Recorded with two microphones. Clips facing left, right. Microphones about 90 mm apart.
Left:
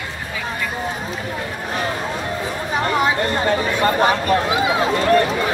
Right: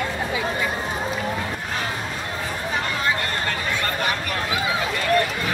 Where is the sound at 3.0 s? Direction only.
20° left (ahead or behind).